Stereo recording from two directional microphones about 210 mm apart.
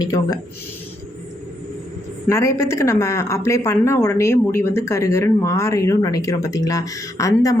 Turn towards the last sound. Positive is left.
turn(degrees=15)  # may be behind; listen again after turning